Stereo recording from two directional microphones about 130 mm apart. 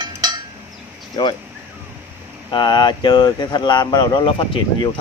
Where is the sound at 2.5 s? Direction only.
35° left (ahead or behind).